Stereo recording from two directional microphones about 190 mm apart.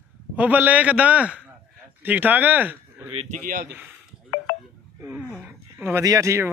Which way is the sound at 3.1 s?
30° right (ahead or behind).